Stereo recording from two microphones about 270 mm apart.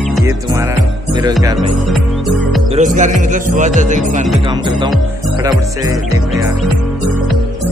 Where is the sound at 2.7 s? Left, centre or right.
Right.